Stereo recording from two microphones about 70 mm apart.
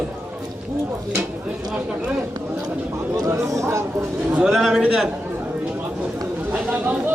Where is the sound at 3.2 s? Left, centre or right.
Right.